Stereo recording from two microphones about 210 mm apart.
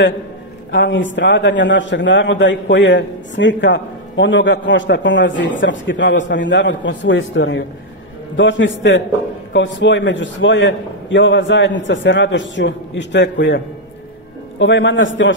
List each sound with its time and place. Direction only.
0.7 s a man's voice: 60° left (ahead or behind)
14.6 s a man's voice: 60° left (ahead or behind)